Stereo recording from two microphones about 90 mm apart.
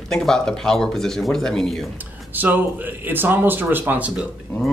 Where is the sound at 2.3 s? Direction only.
20° right (ahead or behind).